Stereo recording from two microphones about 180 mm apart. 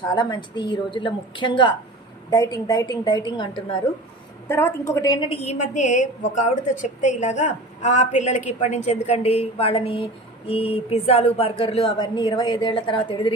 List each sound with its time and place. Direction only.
0.1 s a woman's voice: 25° left (ahead or behind)
4.5 s a woman's voice: 15° left (ahead or behind)
5.3 s a woman's voice: 35° left (ahead or behind)